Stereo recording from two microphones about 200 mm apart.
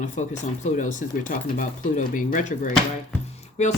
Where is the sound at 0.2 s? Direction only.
35° left (ahead or behind).